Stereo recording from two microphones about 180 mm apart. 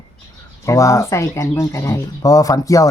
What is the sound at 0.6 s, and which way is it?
A man's voice, 15° left (ahead or behind).